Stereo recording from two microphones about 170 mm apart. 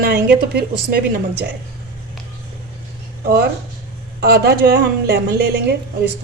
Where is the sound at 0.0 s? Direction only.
70° right (ahead or behind).